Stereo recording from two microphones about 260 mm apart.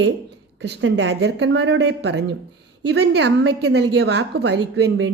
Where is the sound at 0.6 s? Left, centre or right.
Right.